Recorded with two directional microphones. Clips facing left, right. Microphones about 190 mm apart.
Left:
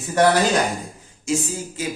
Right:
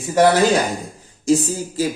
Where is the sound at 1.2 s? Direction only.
35° right (ahead or behind).